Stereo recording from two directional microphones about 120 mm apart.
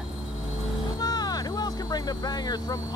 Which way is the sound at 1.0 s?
35° left (ahead or behind).